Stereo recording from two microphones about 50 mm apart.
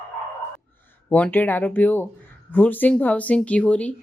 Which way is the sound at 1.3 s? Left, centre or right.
Left.